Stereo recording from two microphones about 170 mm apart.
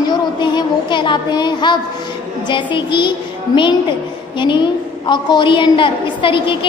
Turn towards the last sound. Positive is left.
turn(degrees=30)  # may be behind; listen again after turning